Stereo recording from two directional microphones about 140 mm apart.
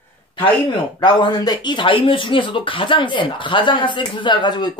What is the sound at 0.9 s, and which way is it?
Speech, 30° left (ahead or behind).